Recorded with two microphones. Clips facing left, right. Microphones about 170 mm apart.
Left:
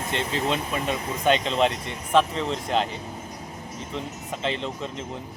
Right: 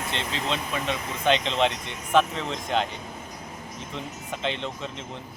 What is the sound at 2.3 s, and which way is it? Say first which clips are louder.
Speech: left 3 dB; 35° left (ahead or behind).